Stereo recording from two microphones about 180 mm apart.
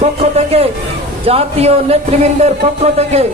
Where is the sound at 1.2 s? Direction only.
35° right (ahead or behind).